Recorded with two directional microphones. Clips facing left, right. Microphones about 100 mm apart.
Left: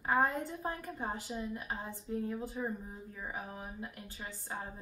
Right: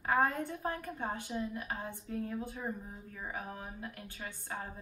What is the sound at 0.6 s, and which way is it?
A woman's voice, 20° left (ahead or behind).